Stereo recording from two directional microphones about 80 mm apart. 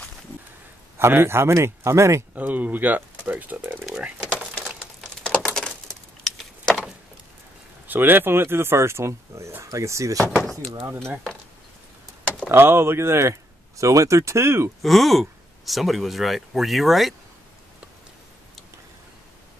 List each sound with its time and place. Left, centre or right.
0.9 s speech: right
2.3 s speech: right
4.4 s a sound: centre
5.0 s a sound: centre
7.9 s speech: right
12.4 s speech: right
14.8 s speech: centre